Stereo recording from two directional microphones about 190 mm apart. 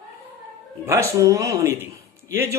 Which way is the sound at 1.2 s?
15° right (ahead or behind).